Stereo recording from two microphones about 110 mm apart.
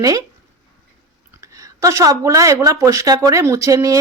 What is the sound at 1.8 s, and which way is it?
Speech, 30° right (ahead or behind).